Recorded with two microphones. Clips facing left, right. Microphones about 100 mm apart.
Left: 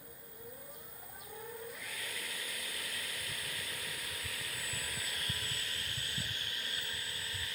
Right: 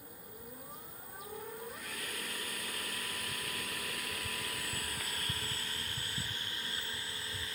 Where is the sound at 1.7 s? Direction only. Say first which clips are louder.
Right 2 dB; 50° right (ahead or behind).